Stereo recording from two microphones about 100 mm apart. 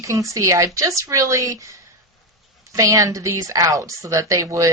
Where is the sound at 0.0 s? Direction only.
30° right (ahead or behind).